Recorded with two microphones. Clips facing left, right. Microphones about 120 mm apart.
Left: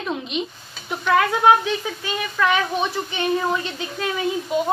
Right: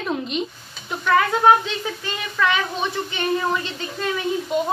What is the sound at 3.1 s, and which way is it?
Speech, 15° left (ahead or behind).